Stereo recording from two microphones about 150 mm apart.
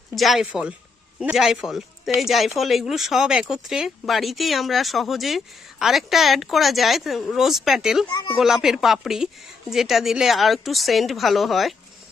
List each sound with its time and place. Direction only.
0.1 s speech: centre (ahead or behind)
8.1 s speech: 25° left (ahead or behind)
8.4 s speech: centre (ahead or behind)